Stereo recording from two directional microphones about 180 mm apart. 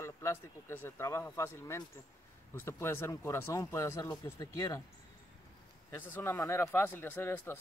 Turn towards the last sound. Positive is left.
turn(degrees=10)  # may be behind; listen again after turning